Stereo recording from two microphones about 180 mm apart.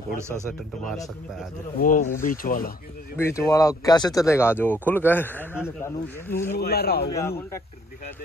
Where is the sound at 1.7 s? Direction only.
45° left (ahead or behind).